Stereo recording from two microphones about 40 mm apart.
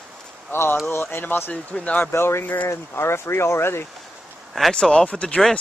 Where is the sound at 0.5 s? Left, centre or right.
Left.